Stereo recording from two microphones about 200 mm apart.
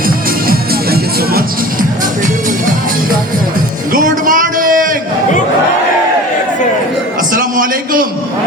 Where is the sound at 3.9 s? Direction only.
40° right (ahead or behind).